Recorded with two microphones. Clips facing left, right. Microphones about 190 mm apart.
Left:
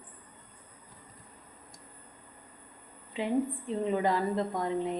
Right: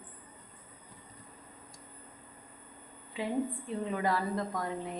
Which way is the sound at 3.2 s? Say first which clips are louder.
Left 3 dB; 20° left (ahead or behind).